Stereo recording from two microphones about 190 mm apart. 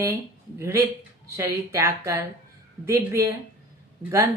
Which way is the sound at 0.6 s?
15° right (ahead or behind).